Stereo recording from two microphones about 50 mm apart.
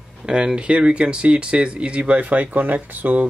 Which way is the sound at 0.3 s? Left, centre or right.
Centre.